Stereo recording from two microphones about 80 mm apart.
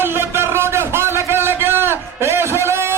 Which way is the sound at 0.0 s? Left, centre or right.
Right.